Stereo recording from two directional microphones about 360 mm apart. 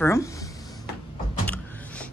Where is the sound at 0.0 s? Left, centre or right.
Centre.